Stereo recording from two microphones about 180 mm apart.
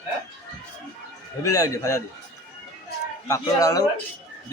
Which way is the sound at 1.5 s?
20° left (ahead or behind).